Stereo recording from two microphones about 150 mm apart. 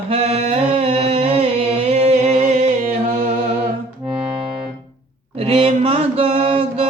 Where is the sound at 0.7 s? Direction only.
40° right (ahead or behind).